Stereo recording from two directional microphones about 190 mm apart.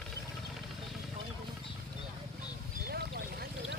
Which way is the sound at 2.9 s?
55° right (ahead or behind).